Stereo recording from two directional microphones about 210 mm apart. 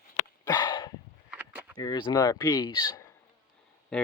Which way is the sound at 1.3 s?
10° right (ahead or behind).